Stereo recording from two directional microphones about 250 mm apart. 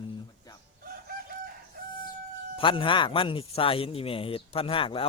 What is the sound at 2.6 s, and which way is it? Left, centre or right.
Speech, left.